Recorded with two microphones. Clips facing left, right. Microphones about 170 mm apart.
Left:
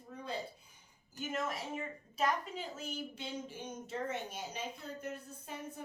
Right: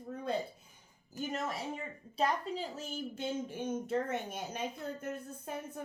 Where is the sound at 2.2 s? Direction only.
40° right (ahead or behind).